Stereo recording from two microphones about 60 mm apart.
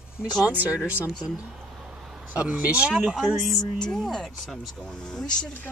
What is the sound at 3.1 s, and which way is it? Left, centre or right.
Speech, centre.